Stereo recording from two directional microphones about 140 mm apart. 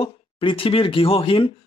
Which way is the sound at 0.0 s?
40° left (ahead or behind).